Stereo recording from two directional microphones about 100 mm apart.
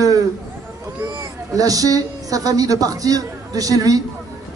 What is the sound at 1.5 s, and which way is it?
A woman's voice, 35° right (ahead or behind).